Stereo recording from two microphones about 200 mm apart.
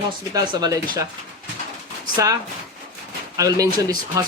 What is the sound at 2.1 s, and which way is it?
Speech, 15° right (ahead or behind).